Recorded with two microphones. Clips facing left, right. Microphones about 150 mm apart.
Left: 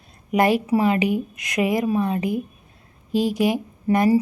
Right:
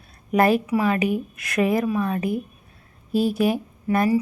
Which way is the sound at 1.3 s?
15° left (ahead or behind).